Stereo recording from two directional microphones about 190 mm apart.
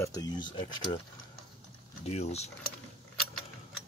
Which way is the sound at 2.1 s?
35° left (ahead or behind).